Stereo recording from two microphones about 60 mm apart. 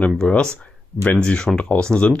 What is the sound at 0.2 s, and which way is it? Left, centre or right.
Speech, centre.